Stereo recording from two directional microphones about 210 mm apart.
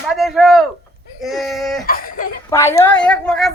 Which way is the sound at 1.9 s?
45° left (ahead or behind).